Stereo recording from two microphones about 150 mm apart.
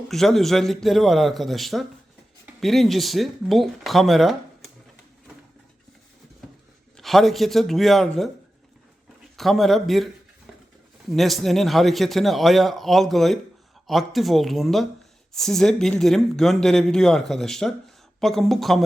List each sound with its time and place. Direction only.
0.1 s speech: centre (ahead or behind)
6.9 s speech: centre (ahead or behind)
9.4 s speech: centre (ahead or behind)
11.1 s speech: centre (ahead or behind)